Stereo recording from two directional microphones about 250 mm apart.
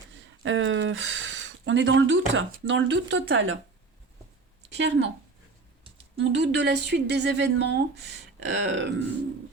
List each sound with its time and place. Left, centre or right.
0.1 s speech: right
4.7 s a woman's voice: right
6.1 s speech: right